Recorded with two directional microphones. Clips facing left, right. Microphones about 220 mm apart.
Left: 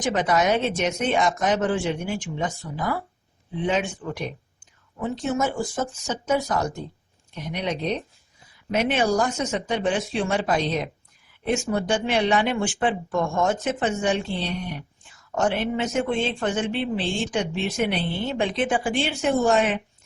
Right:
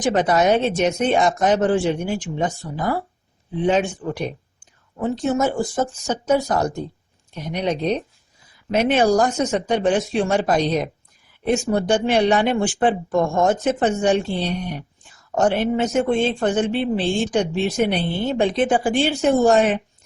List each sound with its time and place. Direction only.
0.0 s speech: 30° right (ahead or behind)
15.4 s speech: 40° right (ahead or behind)